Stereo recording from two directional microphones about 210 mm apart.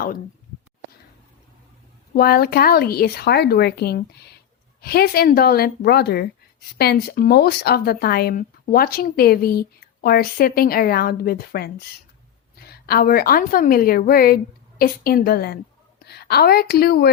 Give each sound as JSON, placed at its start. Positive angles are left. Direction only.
{"t": 2.1, "sound": "a woman's voice", "side_deg": 45}